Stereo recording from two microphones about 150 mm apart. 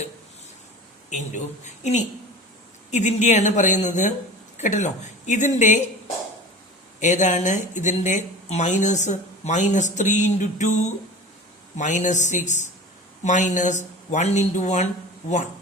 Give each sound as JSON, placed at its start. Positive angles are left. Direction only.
{"t": 1.1, "sound": "speech", "side_deg": 55}
{"t": 7.0, "sound": "speech", "side_deg": 55}